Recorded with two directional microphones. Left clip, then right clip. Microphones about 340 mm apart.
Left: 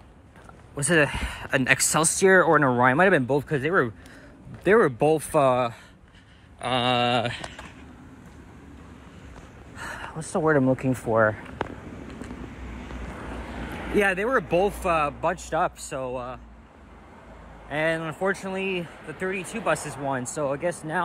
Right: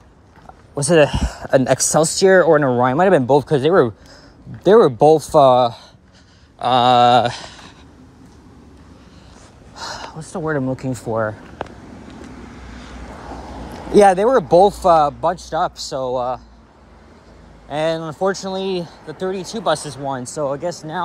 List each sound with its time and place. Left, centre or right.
0.8 s speech: centre
3.1 s speech: centre
4.9 s speech: centre
5.3 s speech: centre
10.3 s speech: centre
13.9 s speech: centre
15.3 s speech: centre
17.6 s speech: centre